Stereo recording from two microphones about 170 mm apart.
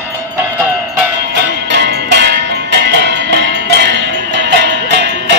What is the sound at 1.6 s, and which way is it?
Music, 90° right.